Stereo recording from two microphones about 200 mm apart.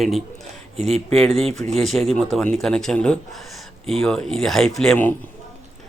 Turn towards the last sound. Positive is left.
turn(degrees=5)  # may be behind; listen again after turning